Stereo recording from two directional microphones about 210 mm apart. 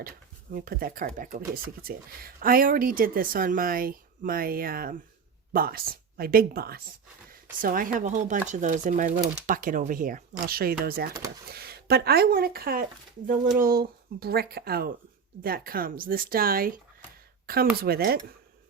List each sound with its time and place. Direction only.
0.5 s speech: 45° right (ahead or behind)
17.4 s a sound: 45° right (ahead or behind)
17.8 s speech: 45° right (ahead or behind)